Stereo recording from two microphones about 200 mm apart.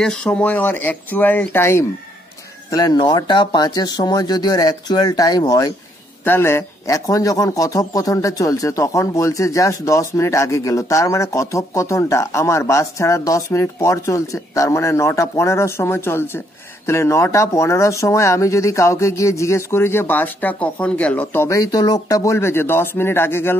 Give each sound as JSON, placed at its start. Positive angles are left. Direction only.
{"t": 0.0, "sound": "speech", "side_deg": 5}